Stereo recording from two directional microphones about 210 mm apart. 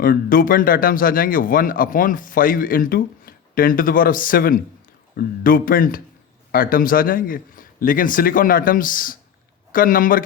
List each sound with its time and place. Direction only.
0.0 s a man's voice: 40° left (ahead or behind)